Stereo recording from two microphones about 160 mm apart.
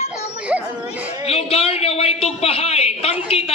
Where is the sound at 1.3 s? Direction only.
40° left (ahead or behind).